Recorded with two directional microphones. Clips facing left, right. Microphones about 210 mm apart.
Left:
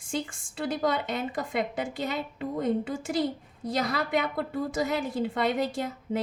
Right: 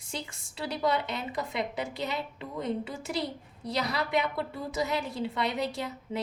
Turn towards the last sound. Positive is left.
turn(degrees=50)  # may be behind; listen again after turning